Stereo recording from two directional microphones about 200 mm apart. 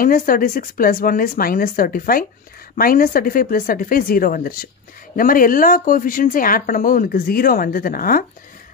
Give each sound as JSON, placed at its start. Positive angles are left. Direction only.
{"t": 0.0, "sound": "speech", "side_deg": 45}